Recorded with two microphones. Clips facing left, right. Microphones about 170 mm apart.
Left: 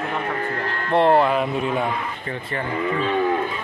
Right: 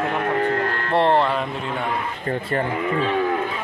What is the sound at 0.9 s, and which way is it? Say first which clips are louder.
Speech: left 2 dB; 5° left (ahead or behind).